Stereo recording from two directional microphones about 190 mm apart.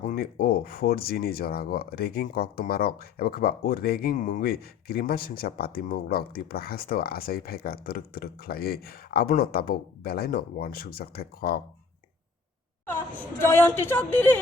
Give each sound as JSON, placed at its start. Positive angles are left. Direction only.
{"t": 0.0, "sound": "speech", "side_deg": 50}
{"t": 12.9, "sound": "a woman's voice", "side_deg": 10}